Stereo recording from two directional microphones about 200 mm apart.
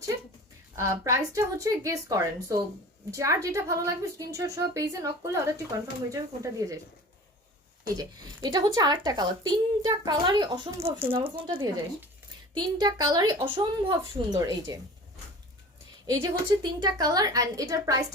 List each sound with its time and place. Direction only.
0.8 s a woman's voice: 15° right (ahead or behind)
7.9 s speech: 20° right (ahead or behind)
16.0 s a woman's voice: 15° right (ahead or behind)